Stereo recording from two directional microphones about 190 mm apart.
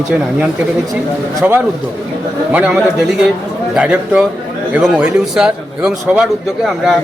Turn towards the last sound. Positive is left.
turn(degrees=-5)  # may be behind; listen again after turning